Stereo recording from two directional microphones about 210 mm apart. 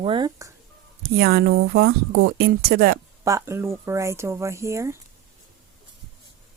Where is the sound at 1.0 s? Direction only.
50° right (ahead or behind).